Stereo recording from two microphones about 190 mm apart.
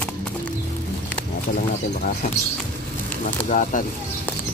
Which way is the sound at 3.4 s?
40° left (ahead or behind).